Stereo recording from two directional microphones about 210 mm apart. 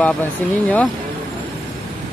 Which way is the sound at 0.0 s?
5° left (ahead or behind).